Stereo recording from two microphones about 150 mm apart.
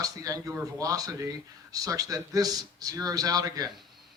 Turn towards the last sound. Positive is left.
turn(degrees=-25)  # may be behind; listen again after turning